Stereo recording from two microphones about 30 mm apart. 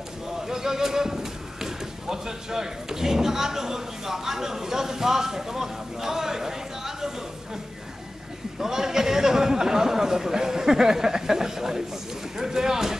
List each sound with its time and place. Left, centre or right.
0.5 s speech: centre
8.5 s speech: centre